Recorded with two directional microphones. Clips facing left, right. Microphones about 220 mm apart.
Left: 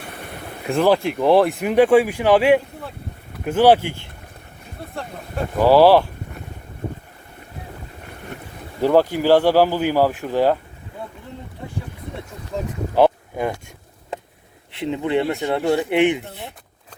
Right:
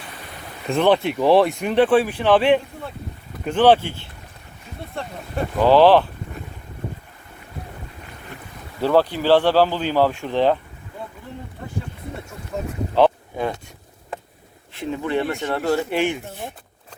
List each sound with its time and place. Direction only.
0.0 s boat: 60° left (ahead or behind)
0.8 s speech: centre (ahead or behind)
4.8 s speech: centre (ahead or behind)
8.8 s speech: 15° left (ahead or behind)
14.8 s speech: 20° left (ahead or behind)